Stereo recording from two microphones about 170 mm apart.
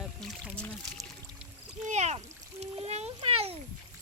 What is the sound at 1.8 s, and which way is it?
Splash, 40° right (ahead or behind).